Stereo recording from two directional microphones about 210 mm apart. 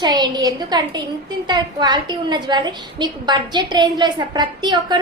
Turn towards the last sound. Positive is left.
turn(degrees=-20)  # may be behind; listen again after turning